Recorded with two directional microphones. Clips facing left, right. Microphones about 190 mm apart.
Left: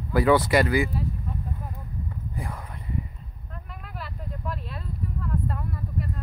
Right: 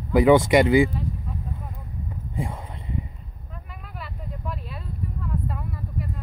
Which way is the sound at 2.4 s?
25° right (ahead or behind).